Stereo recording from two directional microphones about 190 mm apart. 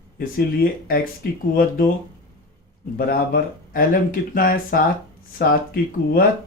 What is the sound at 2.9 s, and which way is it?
Speech, 50° left (ahead or behind).